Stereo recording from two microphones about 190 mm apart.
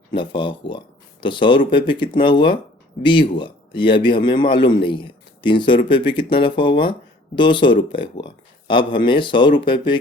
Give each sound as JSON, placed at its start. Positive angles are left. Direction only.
{"t": 0.1, "sound": "a man's voice", "side_deg": 25}